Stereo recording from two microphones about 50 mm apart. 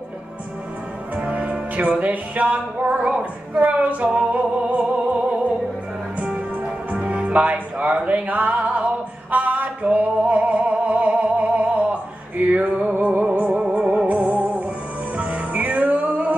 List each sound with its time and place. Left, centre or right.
1.1 s music: right
13.3 s music: right
13.6 s music: right